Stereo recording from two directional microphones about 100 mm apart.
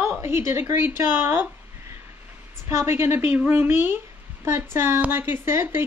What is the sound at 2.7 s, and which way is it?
A woman's voice, 25° right (ahead or behind).